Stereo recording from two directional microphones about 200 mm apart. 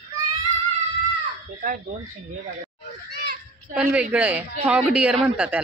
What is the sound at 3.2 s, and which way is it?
Children playing, 50° right (ahead or behind).